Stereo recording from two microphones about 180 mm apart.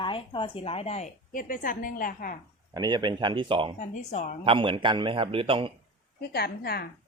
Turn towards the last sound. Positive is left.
turn(degrees=60)  # may be behind; listen again after turning